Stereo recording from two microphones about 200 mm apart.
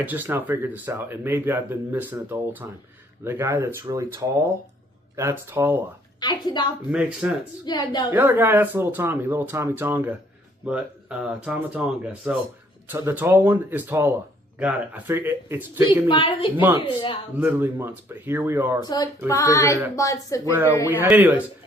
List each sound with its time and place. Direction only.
0.0 s speech: 10° right (ahead or behind)
6.1 s a woman's voice: 20° left (ahead or behind)
6.9 s speech: 5° right (ahead or behind)
7.6 s a woman's voice: 20° left (ahead or behind)
8.1 s speech: 10° right (ahead or behind)
16.0 s a woman's voice: 25° left (ahead or behind)
16.6 s speech: 10° right (ahead or behind)
16.8 s a woman's voice: 25° left (ahead or behind)
17.3 s speech: 10° right (ahead or behind)
19.3 s female singing: 15° left (ahead or behind)
20.8 s speech: 10° right (ahead or behind)